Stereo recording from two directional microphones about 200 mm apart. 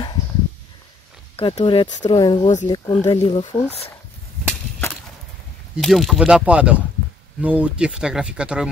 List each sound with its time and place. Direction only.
1.3 s speech: 20° left (ahead or behind)
4.5 s a sound: 5° left (ahead or behind)
5.8 s speech: centre (ahead or behind)